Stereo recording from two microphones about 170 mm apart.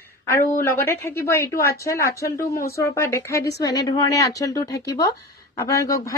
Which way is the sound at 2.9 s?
15° left (ahead or behind).